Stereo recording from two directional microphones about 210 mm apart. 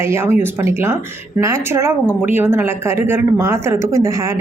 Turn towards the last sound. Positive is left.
turn(degrees=-15)  # may be behind; listen again after turning